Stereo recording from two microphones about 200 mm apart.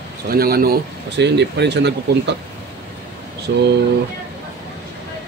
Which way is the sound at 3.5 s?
60° right (ahead or behind).